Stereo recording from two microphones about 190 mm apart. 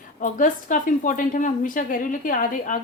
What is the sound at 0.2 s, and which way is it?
A woman's voice, 45° left (ahead or behind).